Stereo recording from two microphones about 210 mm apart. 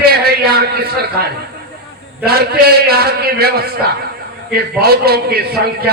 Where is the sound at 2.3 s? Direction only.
50° right (ahead or behind).